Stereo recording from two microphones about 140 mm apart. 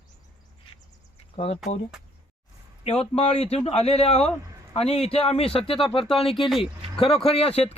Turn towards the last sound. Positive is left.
turn(degrees=50)  # may be behind; listen again after turning